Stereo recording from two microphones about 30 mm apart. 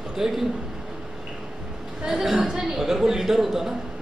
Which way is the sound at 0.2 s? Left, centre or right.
Centre.